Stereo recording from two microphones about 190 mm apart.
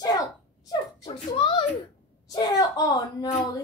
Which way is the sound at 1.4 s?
20° left (ahead or behind).